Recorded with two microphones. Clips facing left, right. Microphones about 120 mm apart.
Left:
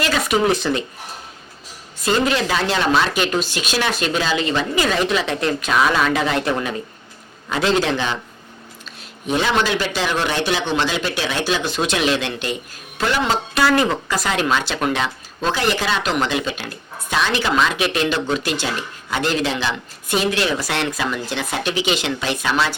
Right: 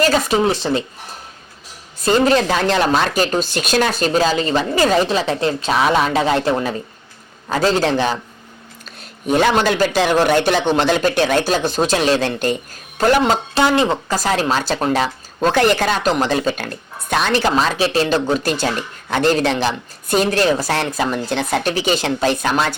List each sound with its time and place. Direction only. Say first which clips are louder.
0.0 s speech: right 3 dB; 35° right (ahead or behind)
2.0 s speech: right 4 dB; 35° right (ahead or behind)
13.5 s speech: left 1 dB; 25° right (ahead or behind); by 22.7 s 45° right (ahead or behind)